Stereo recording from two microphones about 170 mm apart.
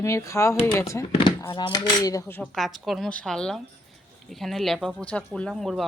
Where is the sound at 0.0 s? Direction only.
15° left (ahead or behind).